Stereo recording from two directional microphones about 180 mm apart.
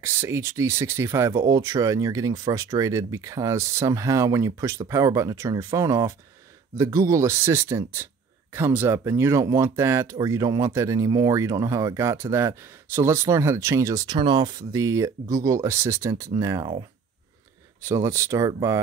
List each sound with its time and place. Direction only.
0.0 s speech: 15° right (ahead or behind)
17.8 s speech: 15° right (ahead or behind)